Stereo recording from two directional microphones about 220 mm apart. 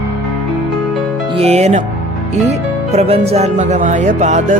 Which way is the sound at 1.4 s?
30° right (ahead or behind).